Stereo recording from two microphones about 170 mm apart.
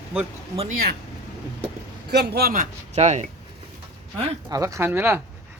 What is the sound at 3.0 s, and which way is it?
Speech, 40° right (ahead or behind).